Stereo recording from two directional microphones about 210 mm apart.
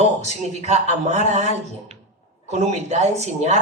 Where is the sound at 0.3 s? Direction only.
30° right (ahead or behind).